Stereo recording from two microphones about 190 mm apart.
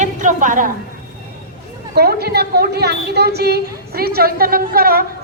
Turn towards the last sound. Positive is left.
turn(degrees=-50)  # may be behind; listen again after turning